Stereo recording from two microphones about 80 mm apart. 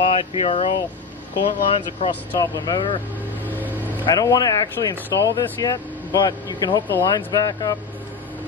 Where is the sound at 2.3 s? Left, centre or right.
Left.